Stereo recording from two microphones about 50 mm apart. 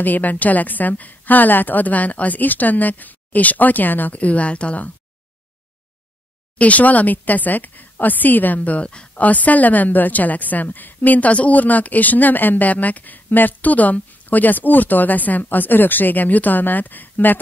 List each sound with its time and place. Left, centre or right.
0.0 s a woman's voice: left
6.6 s a woman's voice: left
9.2 s a woman's voice: left